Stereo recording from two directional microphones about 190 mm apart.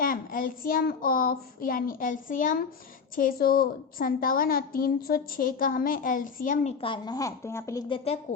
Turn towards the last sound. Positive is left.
turn(degrees=20)  # may be behind; listen again after turning